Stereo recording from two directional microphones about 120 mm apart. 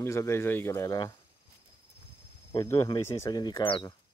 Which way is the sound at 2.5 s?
25° left (ahead or behind).